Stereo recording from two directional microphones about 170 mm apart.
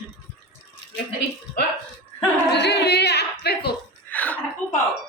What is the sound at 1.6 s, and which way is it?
Speech, 70° left (ahead or behind).